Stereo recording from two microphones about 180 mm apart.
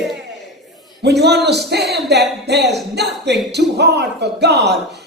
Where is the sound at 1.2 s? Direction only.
65° right (ahead or behind).